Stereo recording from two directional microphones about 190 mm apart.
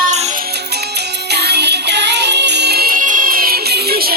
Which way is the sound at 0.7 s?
60° right (ahead or behind).